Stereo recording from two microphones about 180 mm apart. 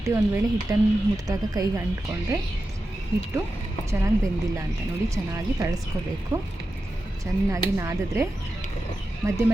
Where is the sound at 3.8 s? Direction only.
15° right (ahead or behind).